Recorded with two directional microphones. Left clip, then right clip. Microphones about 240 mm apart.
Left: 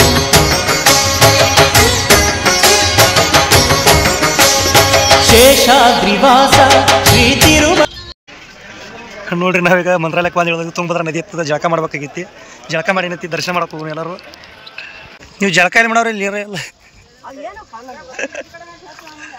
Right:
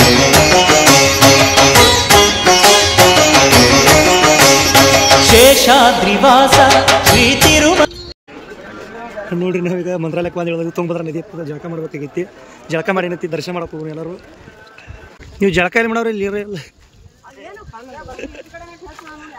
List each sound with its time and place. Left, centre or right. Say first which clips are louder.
0.0 s music: right 2 dB; centre
6.2 s a man's voice: even; centre
9.3 s a man's voice: left 8 dB; centre
11.1 s a man's voice: left 8 dB; left
11.9 s a man's voice: even; centre
15.3 s a man's voice: left 3 dB; centre
18.1 s speech: left 10 dB; centre